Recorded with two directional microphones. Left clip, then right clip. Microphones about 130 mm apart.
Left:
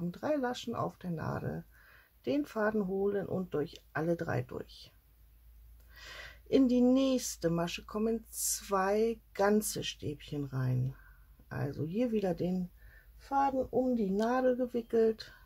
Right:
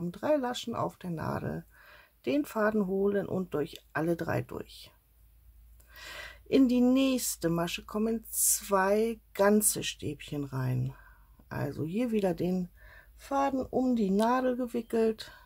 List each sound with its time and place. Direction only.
0.1 s speech: 35° right (ahead or behind)
5.9 s speech: 35° right (ahead or behind)
13.2 s speech: 55° right (ahead or behind)